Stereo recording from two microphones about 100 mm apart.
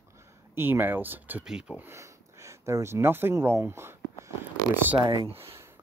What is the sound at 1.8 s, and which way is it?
Speech, 30° right (ahead or behind).